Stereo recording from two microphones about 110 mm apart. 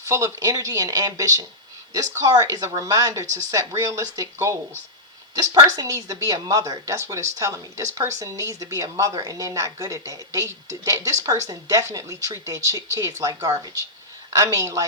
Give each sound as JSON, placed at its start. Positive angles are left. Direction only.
{"t": 0.1, "sound": "speech", "side_deg": -30}